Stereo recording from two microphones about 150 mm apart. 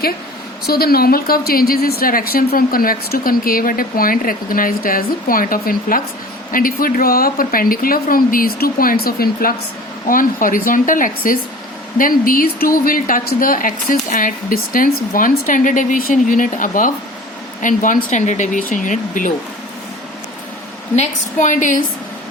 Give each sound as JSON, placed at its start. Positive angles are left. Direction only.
{"t": 0.6, "sound": "a woman's voice", "side_deg": 90}
{"t": 10.1, "sound": "a woman's voice", "side_deg": 65}
{"t": 20.9, "sound": "a woman's voice", "side_deg": 50}